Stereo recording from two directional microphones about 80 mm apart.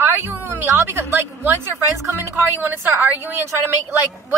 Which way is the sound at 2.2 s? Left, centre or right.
Right.